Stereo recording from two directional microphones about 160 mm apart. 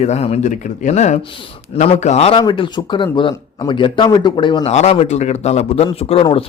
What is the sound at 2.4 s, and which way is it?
Speech, 30° left (ahead or behind).